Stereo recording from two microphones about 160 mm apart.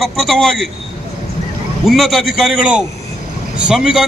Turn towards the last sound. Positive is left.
turn(degrees=0)  # may be behind; listen again after turning